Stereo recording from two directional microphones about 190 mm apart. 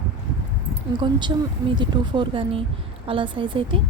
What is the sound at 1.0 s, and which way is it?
A woman's voice, 25° right (ahead or behind).